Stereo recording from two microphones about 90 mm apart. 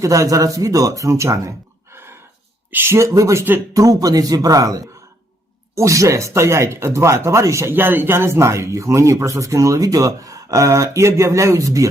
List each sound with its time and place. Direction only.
0.0 s a man's voice: 40° right (ahead or behind)